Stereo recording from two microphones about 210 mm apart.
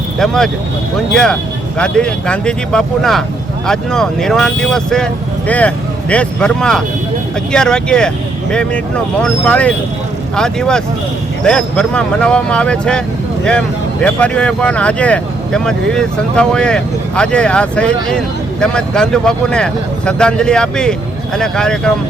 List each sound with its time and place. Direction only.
0.2 s speech: centre (ahead or behind)
14.0 s speech: 5° left (ahead or behind)